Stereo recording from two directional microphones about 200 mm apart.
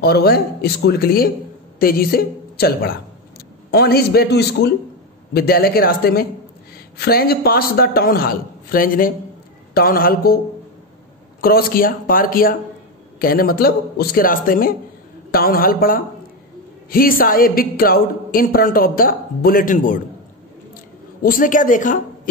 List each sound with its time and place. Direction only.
0.0 s a woman's voice: 55° left (ahead or behind)
11.4 s speech: 50° left (ahead or behind)
21.2 s a woman's voice: 45° left (ahead or behind)